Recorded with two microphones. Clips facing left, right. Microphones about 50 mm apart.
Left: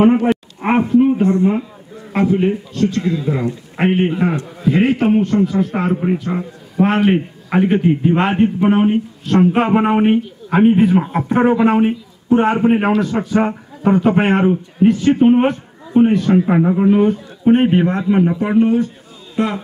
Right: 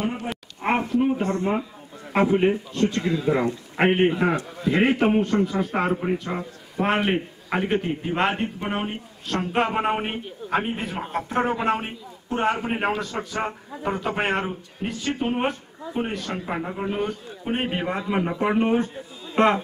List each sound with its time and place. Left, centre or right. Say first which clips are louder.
0.0 s a man's voice: left 16 dB; left
0.7 s a sound: left 8 dB; centre
2.1 s a man's voice: left 4 dB; centre
3.0 s a man's voice: left 3 dB; centre
5.9 s a man's voice: left 7 dB; centre
15.0 s speech: left 12 dB; left
15.3 s speech: left 11 dB; centre
16.3 s speech: left 15 dB; centre
17.8 s a man's voice: left 9 dB; centre
18.6 s a man's voice: left 7 dB; right